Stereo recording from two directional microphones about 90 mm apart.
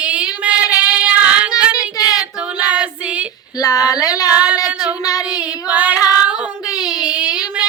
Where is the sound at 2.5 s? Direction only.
15° right (ahead or behind).